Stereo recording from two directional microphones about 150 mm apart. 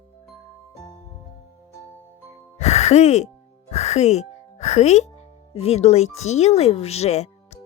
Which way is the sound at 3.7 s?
45° left (ahead or behind).